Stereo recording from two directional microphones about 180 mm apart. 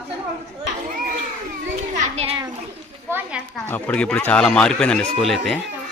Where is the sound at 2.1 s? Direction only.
35° right (ahead or behind).